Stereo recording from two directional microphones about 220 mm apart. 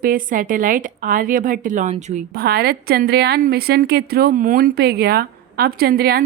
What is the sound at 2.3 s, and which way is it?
A woman's voice, 45° right (ahead or behind).